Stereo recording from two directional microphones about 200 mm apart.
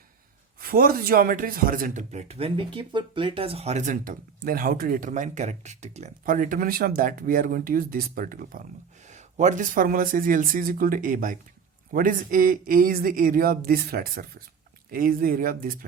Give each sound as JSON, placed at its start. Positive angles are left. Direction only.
{"t": 0.6, "sound": "speech", "side_deg": -45}